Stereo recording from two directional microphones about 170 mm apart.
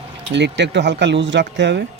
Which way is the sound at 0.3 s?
90° right.